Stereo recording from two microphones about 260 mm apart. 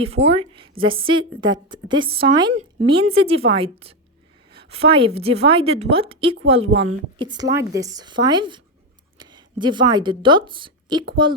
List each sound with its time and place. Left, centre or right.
0.0 s a woman's voice: right